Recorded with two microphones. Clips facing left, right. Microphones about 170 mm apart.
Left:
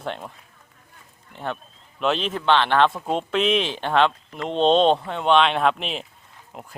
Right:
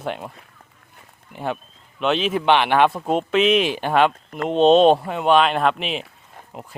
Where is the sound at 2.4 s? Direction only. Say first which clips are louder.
Right 1 dB; 15° right (ahead or behind).